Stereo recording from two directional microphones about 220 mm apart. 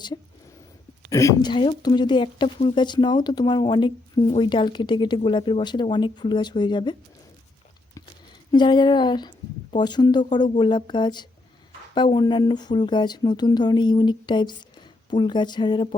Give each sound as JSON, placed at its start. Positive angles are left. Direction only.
{"t": 1.1, "sound": "speech", "side_deg": 15}
{"t": 8.5, "sound": "speech", "side_deg": 20}